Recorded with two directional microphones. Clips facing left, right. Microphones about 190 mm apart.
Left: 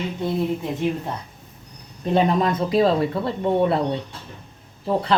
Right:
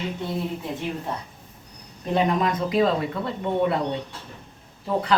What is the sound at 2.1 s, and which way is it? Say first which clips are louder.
A man's voice: left 3 dB; 35° left (ahead or behind).